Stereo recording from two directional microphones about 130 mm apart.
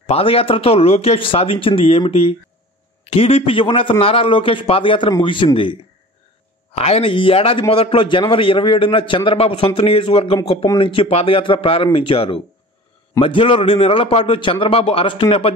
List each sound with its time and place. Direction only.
0.0 s a man's voice: 50° left (ahead or behind)
6.7 s a man's voice: 50° left (ahead or behind)